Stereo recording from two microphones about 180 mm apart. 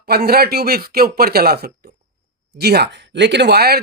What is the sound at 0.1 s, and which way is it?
Speech, 60° right (ahead or behind).